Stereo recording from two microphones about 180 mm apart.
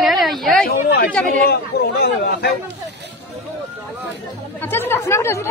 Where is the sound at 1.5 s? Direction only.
65° left (ahead or behind).